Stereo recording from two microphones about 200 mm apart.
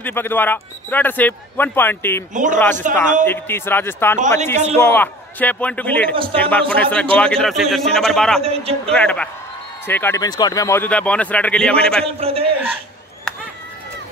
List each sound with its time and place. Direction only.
0.0 s speech: 10° left (ahead or behind)
2.3 s a man's voice: 40° right (ahead or behind)
3.3 s a man's voice: 10° left (ahead or behind)
8.5 s a man's voice: 30° right (ahead or behind)
8.9 s a man's voice: 5° left (ahead or behind)
12.2 s a man's voice: 30° right (ahead or behind)